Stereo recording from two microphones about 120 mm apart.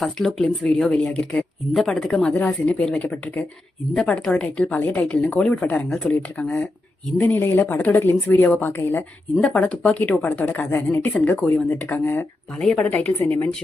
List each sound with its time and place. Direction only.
0.0 s a woman's voice: 5° left (ahead or behind)